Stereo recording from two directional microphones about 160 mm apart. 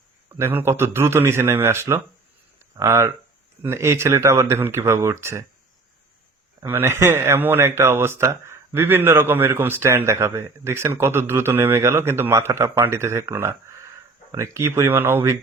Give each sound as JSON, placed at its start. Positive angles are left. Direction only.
{"t": 0.3, "sound": "speech", "side_deg": -15}
{"t": 6.7, "sound": "speech", "side_deg": -15}